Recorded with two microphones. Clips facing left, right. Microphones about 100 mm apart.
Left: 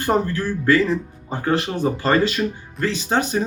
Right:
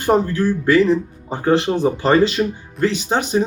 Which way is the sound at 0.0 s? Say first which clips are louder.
Right 4 dB; 20° right (ahead or behind).